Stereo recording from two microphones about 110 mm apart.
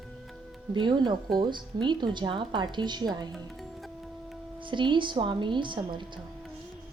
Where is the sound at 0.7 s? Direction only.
45° right (ahead or behind).